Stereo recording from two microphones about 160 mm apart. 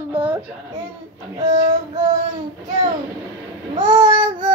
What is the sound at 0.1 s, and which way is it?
Baby cry, 10° right (ahead or behind).